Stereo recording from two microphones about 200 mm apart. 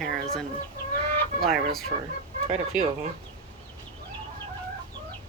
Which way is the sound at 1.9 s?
25° right (ahead or behind).